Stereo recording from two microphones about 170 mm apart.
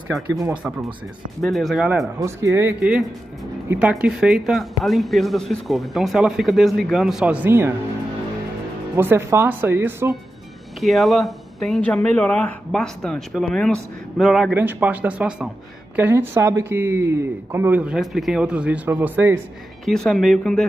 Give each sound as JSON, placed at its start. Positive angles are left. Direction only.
{"t": 0.5, "sound": "speech", "side_deg": -5}
{"t": 2.1, "sound": "speech", "side_deg": -20}
{"t": 2.8, "sound": "speech", "side_deg": -5}
{"t": 8.9, "sound": "speech", "side_deg": -15}
{"t": 10.8, "sound": "speech", "side_deg": 0}
{"t": 19.8, "sound": "speech", "side_deg": 0}